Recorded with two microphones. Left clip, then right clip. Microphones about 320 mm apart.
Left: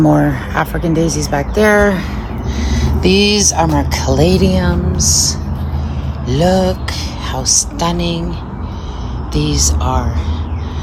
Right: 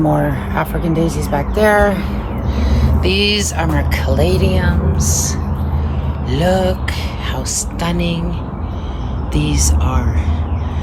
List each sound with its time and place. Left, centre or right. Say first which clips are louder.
0.1 s speech: left 3 dB; left; by 8.2 s centre
9.3 s speech: left 3 dB; centre